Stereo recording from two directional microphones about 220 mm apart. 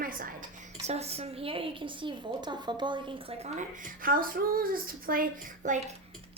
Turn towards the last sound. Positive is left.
turn(degrees=-35)  # may be behind; listen again after turning